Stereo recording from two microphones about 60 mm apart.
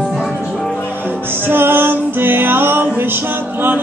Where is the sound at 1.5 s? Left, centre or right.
Right.